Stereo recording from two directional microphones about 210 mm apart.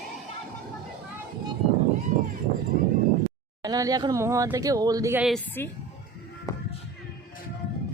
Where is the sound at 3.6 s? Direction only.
15° right (ahead or behind).